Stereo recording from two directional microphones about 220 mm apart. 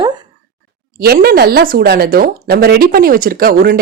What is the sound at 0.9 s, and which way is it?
Speech, 45° right (ahead or behind).